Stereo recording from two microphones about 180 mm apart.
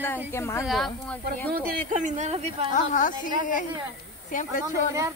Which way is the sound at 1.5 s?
50° right (ahead or behind).